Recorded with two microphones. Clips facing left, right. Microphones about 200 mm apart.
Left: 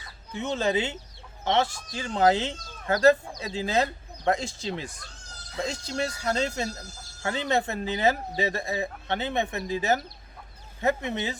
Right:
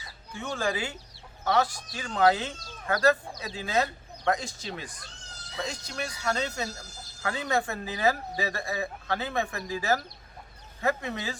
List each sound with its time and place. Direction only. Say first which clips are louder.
0.3 s speech: left 4 dB; 20° left (ahead or behind)